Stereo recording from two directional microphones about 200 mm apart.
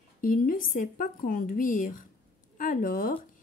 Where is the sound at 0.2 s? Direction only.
45° left (ahead or behind).